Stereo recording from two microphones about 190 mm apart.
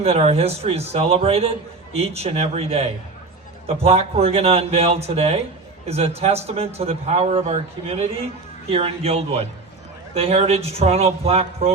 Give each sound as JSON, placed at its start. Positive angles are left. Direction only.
{"t": 0.0, "sound": "a man's voice", "side_deg": -35}